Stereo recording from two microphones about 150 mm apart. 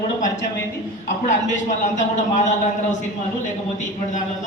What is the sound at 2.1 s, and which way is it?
Speech, 55° left (ahead or behind).